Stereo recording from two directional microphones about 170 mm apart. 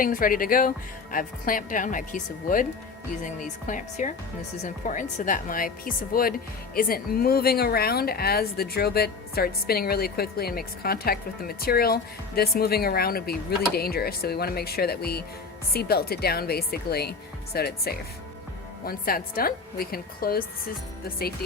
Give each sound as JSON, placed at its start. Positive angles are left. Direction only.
{"t": 0.0, "sound": "a woman's voice", "side_deg": 55}
{"t": 3.7, "sound": "a woman's voice", "side_deg": 50}